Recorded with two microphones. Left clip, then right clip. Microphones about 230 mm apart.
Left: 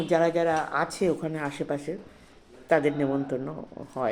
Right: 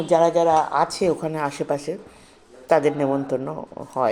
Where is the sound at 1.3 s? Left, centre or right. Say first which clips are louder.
Right 7 dB; right.